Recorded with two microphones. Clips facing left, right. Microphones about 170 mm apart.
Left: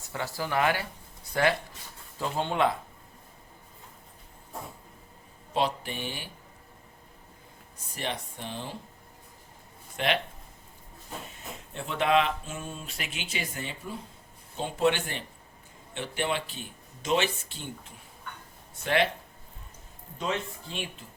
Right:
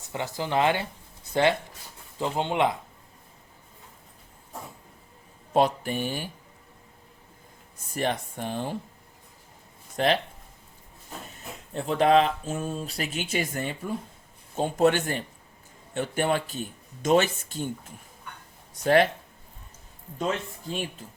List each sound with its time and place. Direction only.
0.0 s speech: 20° right (ahead or behind)
5.5 s speech: 45° right (ahead or behind)
7.9 s speech: 45° right (ahead or behind)
10.0 s speech: 40° right (ahead or behind)
11.7 s speech: 35° right (ahead or behind)
20.1 s speech: 45° right (ahead or behind)